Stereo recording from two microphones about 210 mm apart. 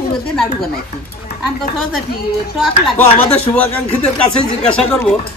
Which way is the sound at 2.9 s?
10° left (ahead or behind).